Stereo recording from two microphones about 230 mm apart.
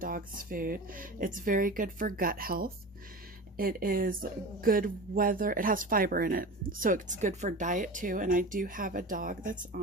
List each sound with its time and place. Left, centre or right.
0.0 s speech: right